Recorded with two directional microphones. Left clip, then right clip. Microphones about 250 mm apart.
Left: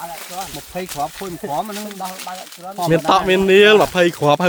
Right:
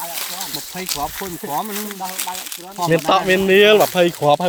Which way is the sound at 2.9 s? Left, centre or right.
Centre.